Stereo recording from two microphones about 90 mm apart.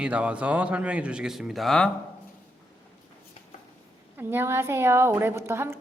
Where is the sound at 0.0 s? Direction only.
15° right (ahead or behind); by 1.9 s 5° left (ahead or behind).